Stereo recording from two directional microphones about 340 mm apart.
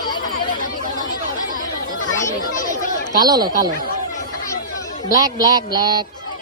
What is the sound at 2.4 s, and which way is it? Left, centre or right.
Chatter, left.